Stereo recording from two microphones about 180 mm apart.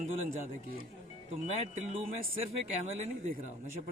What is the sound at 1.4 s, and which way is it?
Speech, 40° right (ahead or behind).